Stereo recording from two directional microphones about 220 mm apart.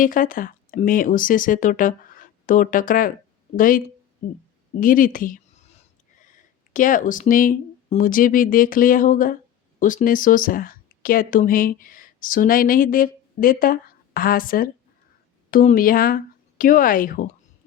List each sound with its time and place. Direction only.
0.0 s speech: 40° left (ahead or behind)
6.7 s speech: 35° left (ahead or behind)